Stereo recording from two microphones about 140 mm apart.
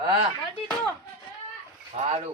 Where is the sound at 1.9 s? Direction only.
55° right (ahead or behind).